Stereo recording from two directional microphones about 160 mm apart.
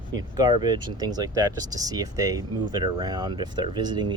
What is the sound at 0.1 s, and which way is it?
Speech, 25° right (ahead or behind).